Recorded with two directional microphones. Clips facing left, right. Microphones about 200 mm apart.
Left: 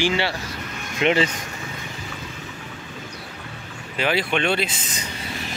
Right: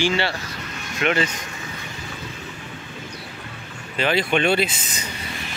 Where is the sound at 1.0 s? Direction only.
25° left (ahead or behind).